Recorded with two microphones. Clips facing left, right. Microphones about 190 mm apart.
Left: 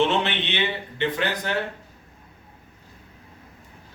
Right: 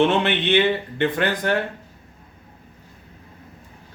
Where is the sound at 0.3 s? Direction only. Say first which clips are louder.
Right 8 dB; 50° right (ahead or behind).